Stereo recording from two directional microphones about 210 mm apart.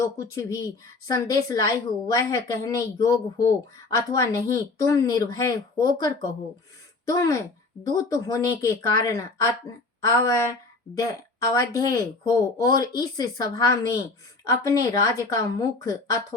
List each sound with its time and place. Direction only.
0.0 s speech: 15° left (ahead or behind)